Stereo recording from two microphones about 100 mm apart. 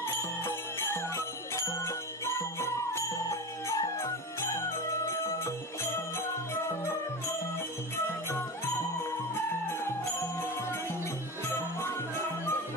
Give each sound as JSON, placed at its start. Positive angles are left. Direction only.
{"t": 0.4, "sound": "jingle bell", "side_deg": 25}
{"t": 11.4, "sound": "music", "side_deg": 25}